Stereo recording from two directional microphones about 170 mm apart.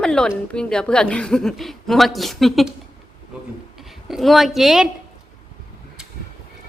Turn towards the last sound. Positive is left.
turn(degrees=0)  # may be behind; listen again after turning